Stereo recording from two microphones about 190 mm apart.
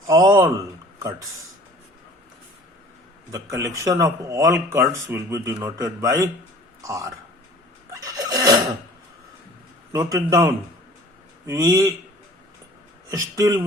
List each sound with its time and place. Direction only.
0.1 s speech: 20° right (ahead or behind)
3.3 s speech: 15° right (ahead or behind)
7.9 s vehicle: 20° right (ahead or behind)
9.9 s speech: 15° right (ahead or behind)
13.1 s speech: 15° right (ahead or behind)